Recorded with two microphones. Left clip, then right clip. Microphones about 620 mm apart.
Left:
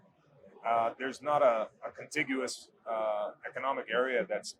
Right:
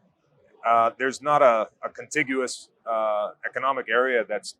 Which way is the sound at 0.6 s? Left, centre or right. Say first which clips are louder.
Right 10 dB; right.